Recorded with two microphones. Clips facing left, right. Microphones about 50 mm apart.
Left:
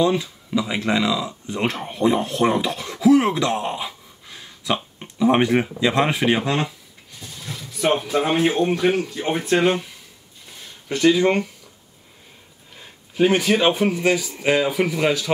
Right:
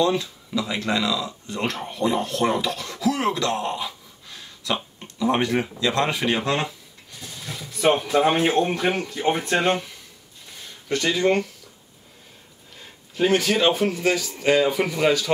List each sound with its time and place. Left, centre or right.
0.0 s speech: centre
7.2 s a sound: centre
7.9 s speech: centre
10.9 s speech: centre
12.7 s speech: centre